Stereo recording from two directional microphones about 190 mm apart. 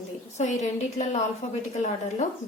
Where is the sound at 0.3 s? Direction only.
40° left (ahead or behind).